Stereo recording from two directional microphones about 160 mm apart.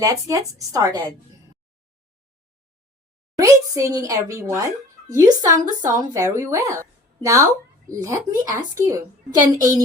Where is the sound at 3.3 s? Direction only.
20° right (ahead or behind).